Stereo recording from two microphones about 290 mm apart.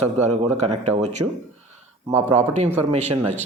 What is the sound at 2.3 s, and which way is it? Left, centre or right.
A man's voice, right.